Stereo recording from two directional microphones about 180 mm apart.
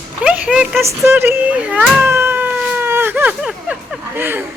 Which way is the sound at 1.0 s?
10° right (ahead or behind).